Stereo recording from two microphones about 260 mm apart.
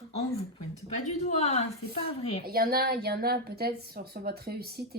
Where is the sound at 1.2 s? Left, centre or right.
Left.